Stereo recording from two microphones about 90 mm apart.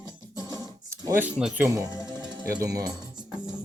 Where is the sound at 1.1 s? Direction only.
20° right (ahead or behind).